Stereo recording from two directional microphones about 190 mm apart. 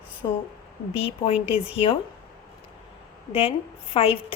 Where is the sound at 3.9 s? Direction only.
30° left (ahead or behind).